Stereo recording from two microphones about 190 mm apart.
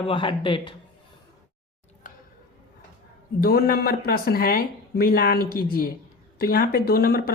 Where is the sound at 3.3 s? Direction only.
50° left (ahead or behind).